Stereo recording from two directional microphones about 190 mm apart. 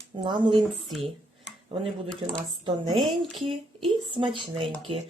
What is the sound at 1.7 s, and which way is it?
Speech, 30° right (ahead or behind).